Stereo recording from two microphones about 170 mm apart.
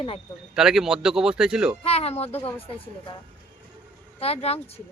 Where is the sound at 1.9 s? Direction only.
35° left (ahead or behind).